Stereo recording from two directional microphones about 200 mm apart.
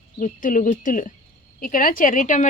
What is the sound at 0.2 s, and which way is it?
A woman's voice, 40° left (ahead or behind).